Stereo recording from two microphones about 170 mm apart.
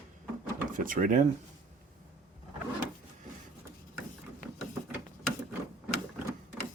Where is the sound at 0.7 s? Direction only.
55° right (ahead or behind).